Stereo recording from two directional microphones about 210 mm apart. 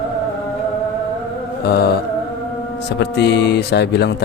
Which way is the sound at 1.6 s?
50° left (ahead or behind).